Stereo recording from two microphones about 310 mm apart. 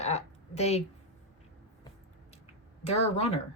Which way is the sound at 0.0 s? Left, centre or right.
Left.